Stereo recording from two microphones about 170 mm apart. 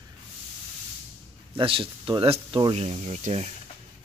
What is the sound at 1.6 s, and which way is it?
Speech, 30° right (ahead or behind).